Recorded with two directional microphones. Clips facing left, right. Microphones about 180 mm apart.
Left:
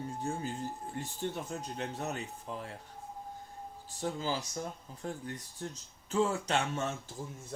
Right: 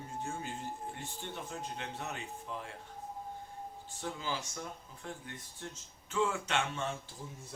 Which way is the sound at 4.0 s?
35° left (ahead or behind).